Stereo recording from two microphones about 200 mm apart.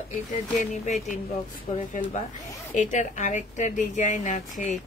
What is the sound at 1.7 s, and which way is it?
A woman's voice, 40° left (ahead or behind).